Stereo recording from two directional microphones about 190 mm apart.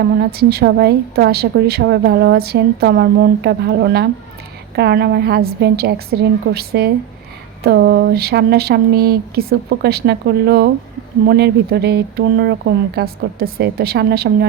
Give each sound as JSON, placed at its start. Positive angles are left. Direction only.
{"t": 0.0, "sound": "a woman's voice", "side_deg": -55}